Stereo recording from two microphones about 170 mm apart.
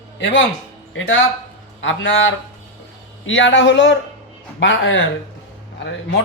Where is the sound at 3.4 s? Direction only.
90° left.